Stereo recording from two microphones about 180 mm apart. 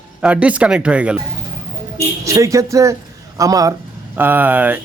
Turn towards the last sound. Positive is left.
turn(degrees=-10)  # may be behind; listen again after turning